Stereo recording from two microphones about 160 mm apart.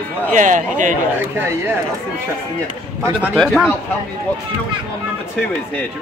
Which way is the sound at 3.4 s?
5° left (ahead or behind).